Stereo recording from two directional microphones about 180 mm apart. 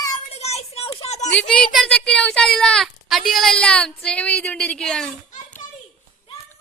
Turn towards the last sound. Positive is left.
turn(degrees=5)  # may be behind; listen again after turning